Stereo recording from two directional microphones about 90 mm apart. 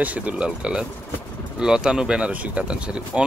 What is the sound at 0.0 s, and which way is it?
Speech, 15° right (ahead or behind).